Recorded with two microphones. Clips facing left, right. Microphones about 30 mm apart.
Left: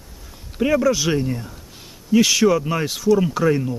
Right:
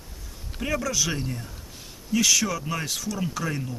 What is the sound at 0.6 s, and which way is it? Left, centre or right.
Speech, centre.